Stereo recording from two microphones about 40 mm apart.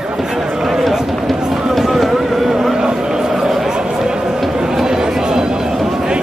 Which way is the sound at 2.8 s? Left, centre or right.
Centre.